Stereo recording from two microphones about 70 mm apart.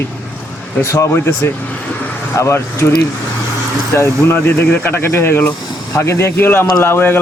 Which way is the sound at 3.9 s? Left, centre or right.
Left.